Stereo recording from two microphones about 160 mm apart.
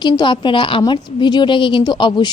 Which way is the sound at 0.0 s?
30° left (ahead or behind).